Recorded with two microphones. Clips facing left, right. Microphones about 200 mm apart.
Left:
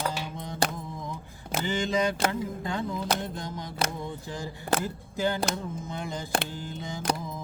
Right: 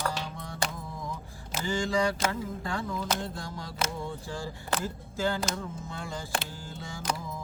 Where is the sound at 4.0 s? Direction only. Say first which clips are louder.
Left 1 dB; 20° left (ahead or behind).